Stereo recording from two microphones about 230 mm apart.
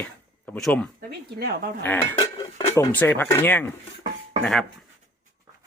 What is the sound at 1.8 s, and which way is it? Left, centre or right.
Speech, centre.